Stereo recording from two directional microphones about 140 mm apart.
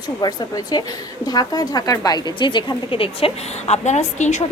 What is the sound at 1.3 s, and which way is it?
Speech, 25° left (ahead or behind).